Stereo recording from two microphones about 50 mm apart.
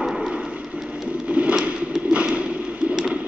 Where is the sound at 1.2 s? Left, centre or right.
Right.